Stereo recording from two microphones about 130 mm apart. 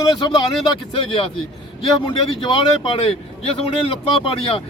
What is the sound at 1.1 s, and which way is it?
Speech, 45° left (ahead or behind).